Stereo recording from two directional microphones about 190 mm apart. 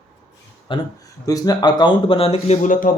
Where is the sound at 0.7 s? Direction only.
25° left (ahead or behind); by 2.9 s 45° left (ahead or behind).